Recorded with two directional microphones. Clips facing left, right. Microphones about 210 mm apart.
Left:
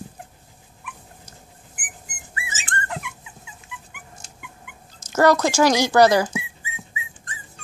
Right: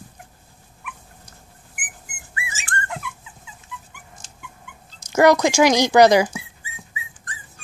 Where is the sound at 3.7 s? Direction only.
15° left (ahead or behind).